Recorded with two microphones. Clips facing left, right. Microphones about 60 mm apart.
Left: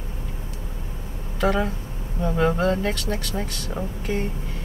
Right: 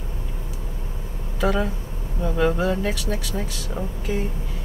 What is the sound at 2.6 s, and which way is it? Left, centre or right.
Speech, centre.